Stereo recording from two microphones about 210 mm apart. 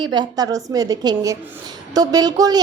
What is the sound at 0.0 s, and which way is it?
A woman's voice, 20° right (ahead or behind).